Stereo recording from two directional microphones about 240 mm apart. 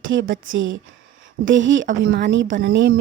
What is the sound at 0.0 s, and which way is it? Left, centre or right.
A woman's voice, right.